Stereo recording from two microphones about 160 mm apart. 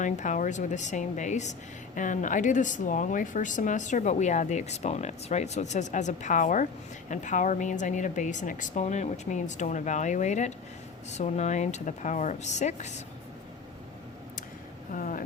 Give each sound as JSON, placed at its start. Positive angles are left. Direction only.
{"t": 0.0, "sound": "speech", "side_deg": 50}
{"t": 14.9, "sound": "speech", "side_deg": 55}